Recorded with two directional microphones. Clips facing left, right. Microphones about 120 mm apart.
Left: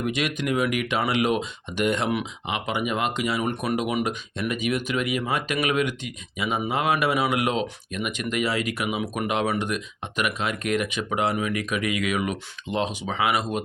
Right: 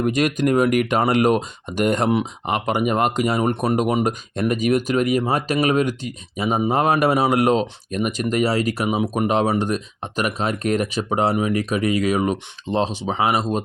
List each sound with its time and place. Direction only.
0.0 s speech: 45° right (ahead or behind)